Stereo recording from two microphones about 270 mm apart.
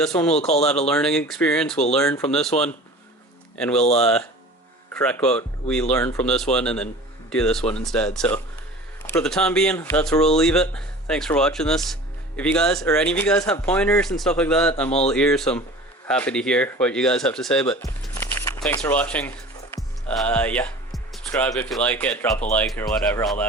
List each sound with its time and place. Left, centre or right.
0.0 s speech: centre
0.3 s speech: left
0.9 s speech: centre
3.8 s speech: left
4.0 s speech: centre
14.8 s speech: left
15.1 s speech: centre